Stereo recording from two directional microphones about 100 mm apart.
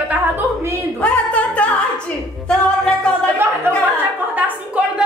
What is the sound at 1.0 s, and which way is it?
A woman's voice, 15° left (ahead or behind).